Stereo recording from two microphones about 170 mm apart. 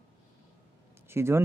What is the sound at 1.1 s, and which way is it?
Speech, 15° right (ahead or behind).